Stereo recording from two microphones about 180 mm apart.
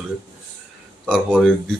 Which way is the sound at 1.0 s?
5° left (ahead or behind).